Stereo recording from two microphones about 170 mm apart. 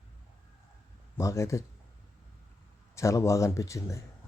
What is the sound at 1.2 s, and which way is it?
Speech, 15° left (ahead or behind).